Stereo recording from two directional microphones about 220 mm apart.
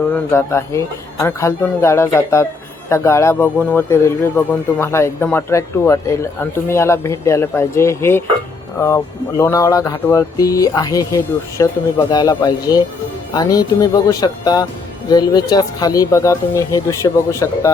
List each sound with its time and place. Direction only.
0.1 s speech: 10° left (ahead or behind)
9.4 s speech: 15° left (ahead or behind)